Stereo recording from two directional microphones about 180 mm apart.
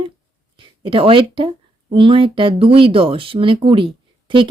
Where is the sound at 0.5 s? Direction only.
30° right (ahead or behind).